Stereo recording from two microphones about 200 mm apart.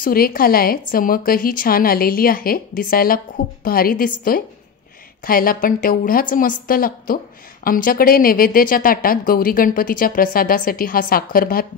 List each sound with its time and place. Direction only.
0.0 s a woman's voice: 45° left (ahead or behind)